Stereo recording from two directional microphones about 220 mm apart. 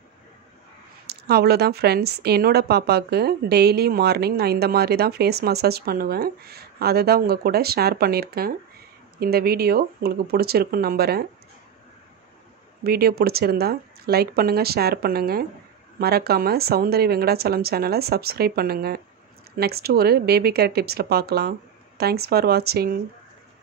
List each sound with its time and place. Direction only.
1.0 s a woman's voice: 45° right (ahead or behind)
12.8 s a woman's voice: 45° right (ahead or behind)